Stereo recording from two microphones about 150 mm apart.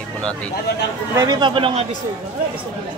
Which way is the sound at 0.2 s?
5° left (ahead or behind).